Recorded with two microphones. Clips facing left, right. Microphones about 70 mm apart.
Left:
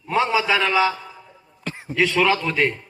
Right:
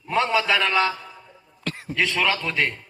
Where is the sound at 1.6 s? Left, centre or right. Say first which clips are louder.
Right 1 dB; left.